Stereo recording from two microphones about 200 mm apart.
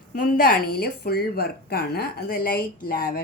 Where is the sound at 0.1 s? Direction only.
50° left (ahead or behind).